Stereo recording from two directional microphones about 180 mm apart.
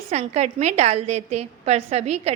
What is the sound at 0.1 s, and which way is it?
A woman's voice, 40° right (ahead or behind).